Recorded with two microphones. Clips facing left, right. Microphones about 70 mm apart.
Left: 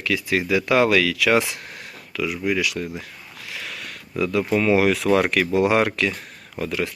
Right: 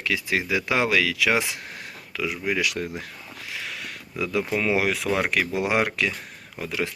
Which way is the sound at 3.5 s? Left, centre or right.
Centre.